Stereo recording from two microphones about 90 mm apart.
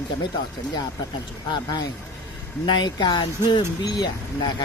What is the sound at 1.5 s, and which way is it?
Speech, 50° left (ahead or behind).